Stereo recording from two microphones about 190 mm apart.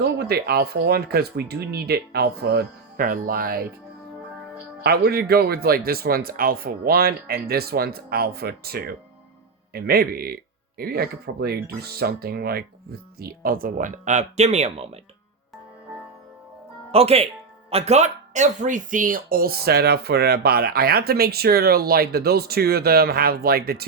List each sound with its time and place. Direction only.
0.0 s speech: 55° right (ahead or behind)
4.8 s speech: 55° right (ahead or behind); by 14.8 s 35° right (ahead or behind)
16.9 s speech: 30° right (ahead or behind); by 23.8 s 55° right (ahead or behind)